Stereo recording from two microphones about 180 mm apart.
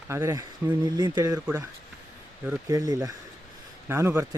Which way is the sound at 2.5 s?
20° right (ahead or behind).